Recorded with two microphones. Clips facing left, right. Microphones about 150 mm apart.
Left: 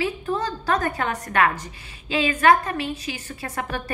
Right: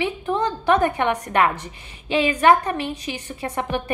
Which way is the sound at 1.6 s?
30° right (ahead or behind).